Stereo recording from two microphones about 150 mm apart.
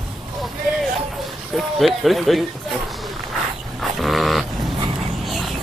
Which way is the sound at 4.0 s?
Centre (ahead or behind).